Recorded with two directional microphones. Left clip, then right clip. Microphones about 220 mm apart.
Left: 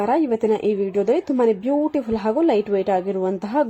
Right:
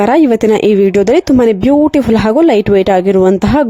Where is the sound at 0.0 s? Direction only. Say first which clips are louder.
Right 11 dB; 45° right (ahead or behind).